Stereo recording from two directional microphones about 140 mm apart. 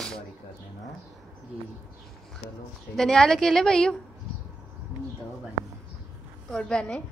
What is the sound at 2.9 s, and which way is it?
A woman's voice, 5° left (ahead or behind).